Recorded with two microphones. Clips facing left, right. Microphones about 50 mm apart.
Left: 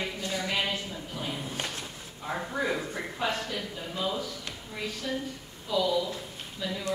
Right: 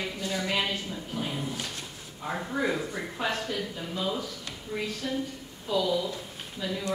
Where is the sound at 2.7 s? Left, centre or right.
Centre.